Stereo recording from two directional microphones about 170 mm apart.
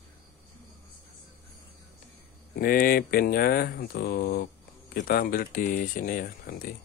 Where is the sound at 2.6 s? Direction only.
60° left (ahead or behind).